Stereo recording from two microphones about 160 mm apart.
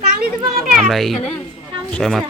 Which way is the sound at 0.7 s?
Centre (ahead or behind).